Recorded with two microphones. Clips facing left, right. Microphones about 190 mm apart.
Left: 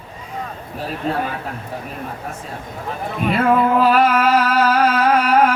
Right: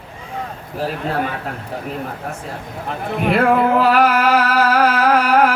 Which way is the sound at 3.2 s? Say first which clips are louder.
Right 1 dB; 75° right (ahead or behind).